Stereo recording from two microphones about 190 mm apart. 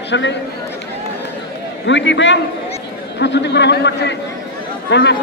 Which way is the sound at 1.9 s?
70° left (ahead or behind).